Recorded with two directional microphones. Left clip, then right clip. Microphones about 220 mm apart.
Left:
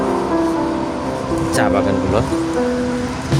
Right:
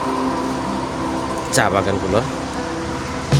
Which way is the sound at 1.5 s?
5° right (ahead or behind).